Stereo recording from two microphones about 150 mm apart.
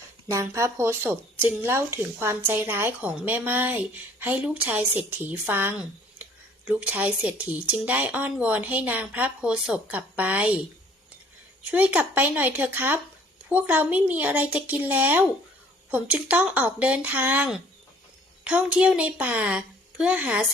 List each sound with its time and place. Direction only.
0.3 s speech: 20° right (ahead or behind)